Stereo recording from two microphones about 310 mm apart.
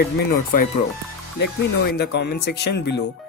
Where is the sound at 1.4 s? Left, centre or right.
Left.